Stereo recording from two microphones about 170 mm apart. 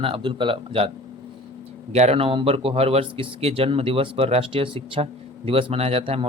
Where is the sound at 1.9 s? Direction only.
40° right (ahead or behind).